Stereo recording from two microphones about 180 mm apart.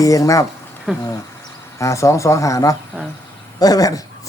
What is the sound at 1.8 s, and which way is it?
Speech, 15° left (ahead or behind).